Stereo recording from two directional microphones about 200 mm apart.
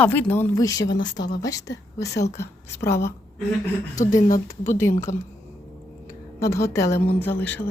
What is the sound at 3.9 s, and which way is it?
Speech, 40° left (ahead or behind).